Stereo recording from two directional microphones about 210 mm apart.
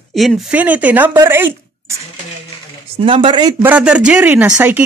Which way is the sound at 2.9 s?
25° right (ahead or behind).